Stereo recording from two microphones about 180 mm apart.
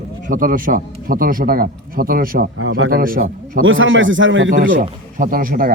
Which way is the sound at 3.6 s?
90° right.